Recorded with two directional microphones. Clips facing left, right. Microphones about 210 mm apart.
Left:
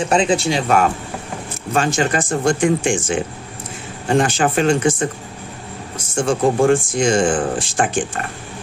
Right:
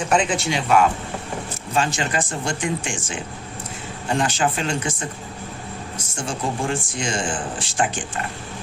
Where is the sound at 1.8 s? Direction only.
45° left (ahead or behind).